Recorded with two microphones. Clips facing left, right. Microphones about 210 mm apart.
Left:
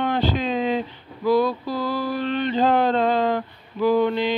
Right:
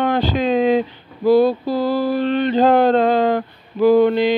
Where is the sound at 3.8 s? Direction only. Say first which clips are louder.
Right 6 dB; 70° right (ahead or behind).